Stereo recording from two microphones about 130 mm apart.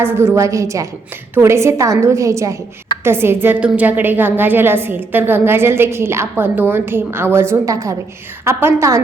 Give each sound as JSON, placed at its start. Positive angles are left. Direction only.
{"t": 0.0, "sound": "a woman's voice", "side_deg": -20}